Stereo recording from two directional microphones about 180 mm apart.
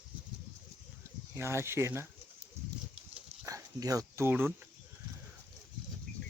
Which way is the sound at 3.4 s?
15° right (ahead or behind).